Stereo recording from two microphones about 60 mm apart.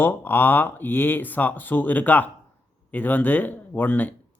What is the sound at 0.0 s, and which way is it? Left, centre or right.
Speech, left.